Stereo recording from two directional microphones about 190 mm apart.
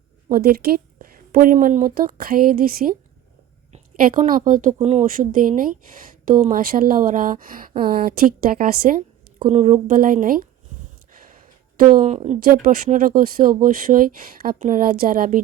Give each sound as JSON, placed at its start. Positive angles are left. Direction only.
{"t": 0.3, "sound": "speech", "side_deg": -50}
{"t": 9.5, "sound": "speech", "side_deg": -40}
{"t": 11.8, "sound": "speech", "side_deg": -45}